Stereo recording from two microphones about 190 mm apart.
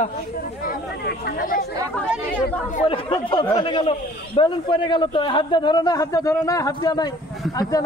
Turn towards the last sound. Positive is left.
turn(degrees=20)  # may be behind; listen again after turning